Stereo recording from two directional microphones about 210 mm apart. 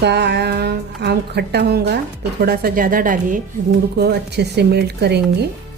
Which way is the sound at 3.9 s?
50° right (ahead or behind).